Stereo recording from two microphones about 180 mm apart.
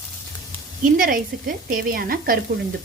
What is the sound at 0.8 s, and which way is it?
Speech, 50° right (ahead or behind).